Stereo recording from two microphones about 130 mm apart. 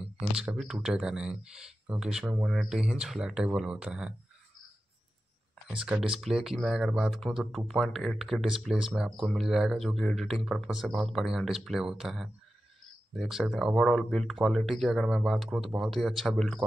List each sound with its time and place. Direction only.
0.0 s speech: 5° right (ahead or behind)
5.8 s speech: 5° right (ahead or behind)